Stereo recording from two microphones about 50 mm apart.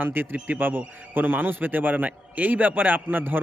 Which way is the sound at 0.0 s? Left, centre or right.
Right.